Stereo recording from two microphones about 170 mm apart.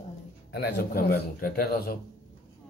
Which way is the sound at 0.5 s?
75° left (ahead or behind).